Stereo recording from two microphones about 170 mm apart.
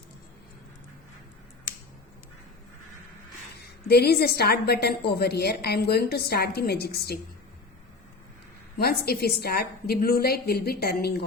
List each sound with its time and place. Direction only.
3.8 s a woman's voice: 70° left (ahead or behind)
8.8 s a woman's voice: 65° left (ahead or behind)